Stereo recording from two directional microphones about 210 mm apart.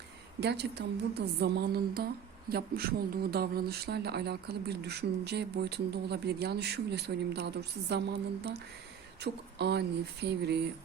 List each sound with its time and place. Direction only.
0.3 s speech: 50° right (ahead or behind)
9.2 s speech: 50° right (ahead or behind)